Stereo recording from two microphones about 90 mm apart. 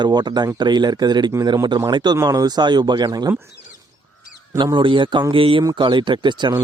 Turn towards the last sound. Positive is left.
turn(degrees=-60)  # may be behind; listen again after turning